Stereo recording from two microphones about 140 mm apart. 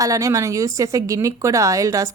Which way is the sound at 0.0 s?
25° right (ahead or behind).